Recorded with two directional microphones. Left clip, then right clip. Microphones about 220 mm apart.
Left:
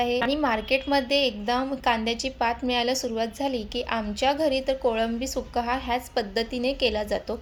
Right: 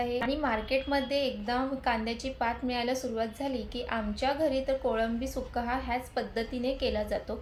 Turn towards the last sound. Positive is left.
turn(degrees=40)  # may be behind; listen again after turning